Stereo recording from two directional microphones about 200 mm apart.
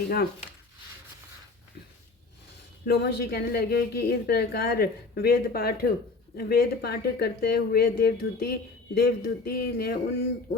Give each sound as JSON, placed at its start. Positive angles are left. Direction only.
{"t": 2.8, "sound": "a woman's voice", "side_deg": 55}